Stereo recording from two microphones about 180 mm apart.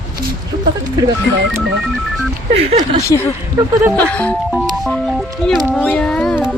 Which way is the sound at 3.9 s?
5° left (ahead or behind).